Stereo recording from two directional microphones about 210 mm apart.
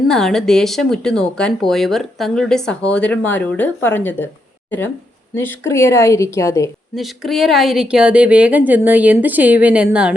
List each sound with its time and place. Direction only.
0.1 s speech: centre (ahead or behind)
5.3 s a woman's voice: 10° left (ahead or behind)
6.9 s speech: centre (ahead or behind)